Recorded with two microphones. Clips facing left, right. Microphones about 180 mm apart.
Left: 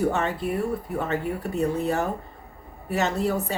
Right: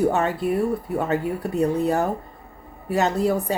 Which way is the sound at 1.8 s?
35° right (ahead or behind).